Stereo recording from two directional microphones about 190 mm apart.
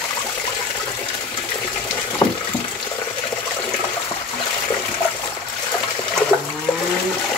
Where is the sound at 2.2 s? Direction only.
25° left (ahead or behind).